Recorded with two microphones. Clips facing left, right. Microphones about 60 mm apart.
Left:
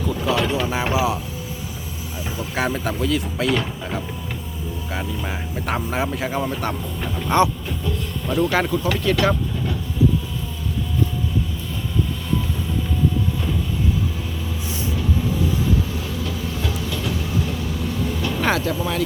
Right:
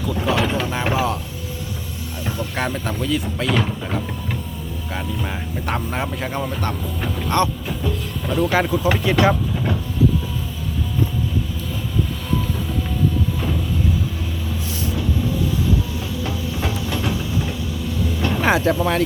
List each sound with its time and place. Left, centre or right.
0.3 s a sound: centre
0.9 s speech: centre
2.2 s speech: centre
7.3 s vehicle: centre
8.3 s speech: centre
16.2 s train: right
18.3 s vehicle: centre
18.6 s speech: right